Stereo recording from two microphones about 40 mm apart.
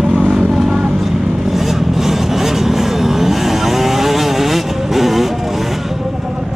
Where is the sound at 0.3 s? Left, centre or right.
Centre.